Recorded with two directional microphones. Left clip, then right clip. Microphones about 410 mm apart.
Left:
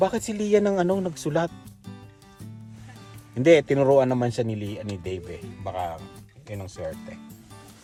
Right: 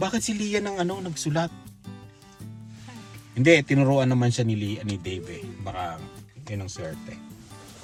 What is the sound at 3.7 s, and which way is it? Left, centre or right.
A man's voice, left.